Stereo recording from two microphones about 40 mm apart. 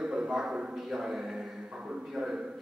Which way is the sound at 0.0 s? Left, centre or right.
Centre.